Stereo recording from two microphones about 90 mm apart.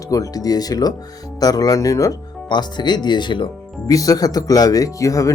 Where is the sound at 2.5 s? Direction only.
55° left (ahead or behind).